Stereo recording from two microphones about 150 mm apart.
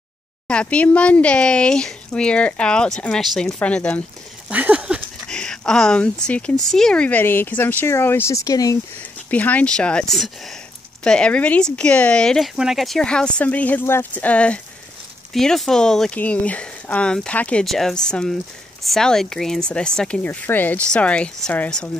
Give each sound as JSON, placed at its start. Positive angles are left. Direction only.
{"t": 0.5, "sound": "speech", "side_deg": 5}
{"t": 4.5, "sound": "a sound", "side_deg": -10}
{"t": 5.3, "sound": "speech", "side_deg": 5}
{"t": 9.3, "sound": "speech", "side_deg": 10}